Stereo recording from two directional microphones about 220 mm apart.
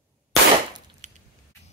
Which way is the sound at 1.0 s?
30° right (ahead or behind).